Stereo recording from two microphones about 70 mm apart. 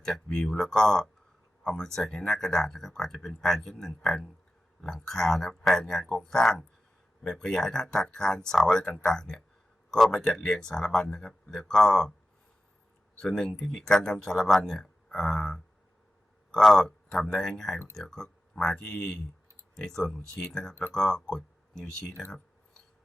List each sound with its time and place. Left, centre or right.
0.0 s speech: centre
13.1 s speech: centre